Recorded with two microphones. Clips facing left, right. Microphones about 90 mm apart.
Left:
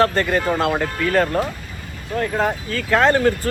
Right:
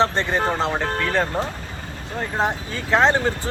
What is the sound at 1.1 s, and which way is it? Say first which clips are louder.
Speech: left 6 dB; 50° left (ahead or behind).